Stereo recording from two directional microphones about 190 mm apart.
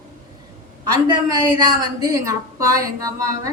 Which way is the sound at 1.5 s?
20° right (ahead or behind).